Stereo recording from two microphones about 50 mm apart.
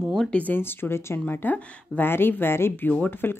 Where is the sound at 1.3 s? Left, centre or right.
Left.